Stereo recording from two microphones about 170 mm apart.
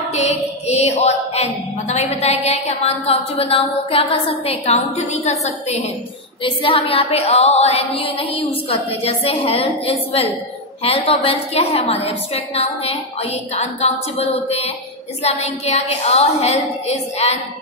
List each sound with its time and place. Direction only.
0.1 s speech: 40° left (ahead or behind)